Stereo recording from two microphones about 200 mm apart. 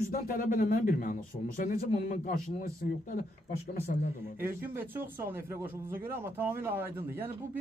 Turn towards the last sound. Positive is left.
turn(degrees=-10)  # may be behind; listen again after turning